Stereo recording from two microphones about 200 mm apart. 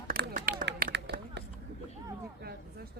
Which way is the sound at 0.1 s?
50° right (ahead or behind).